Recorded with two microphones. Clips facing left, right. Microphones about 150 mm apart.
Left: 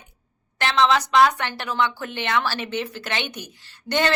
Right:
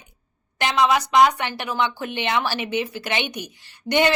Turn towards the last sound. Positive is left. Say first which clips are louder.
# right 3 dB
turn(degrees=-15)  # may be behind; listen again after turning